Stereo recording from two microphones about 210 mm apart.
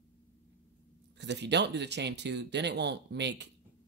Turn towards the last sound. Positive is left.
turn(degrees=-55)  # may be behind; listen again after turning